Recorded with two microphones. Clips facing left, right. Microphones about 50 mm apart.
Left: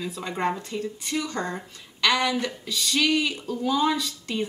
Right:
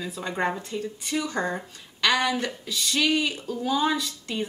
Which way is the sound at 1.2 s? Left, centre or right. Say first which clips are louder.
Right 2 dB; centre.